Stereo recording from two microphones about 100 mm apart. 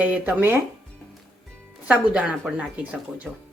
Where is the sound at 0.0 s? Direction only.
15° right (ahead or behind).